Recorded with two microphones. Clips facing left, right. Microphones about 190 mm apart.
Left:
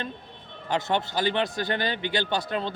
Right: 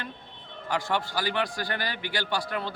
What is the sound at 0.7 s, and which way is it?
A man's voice, 20° left (ahead or behind).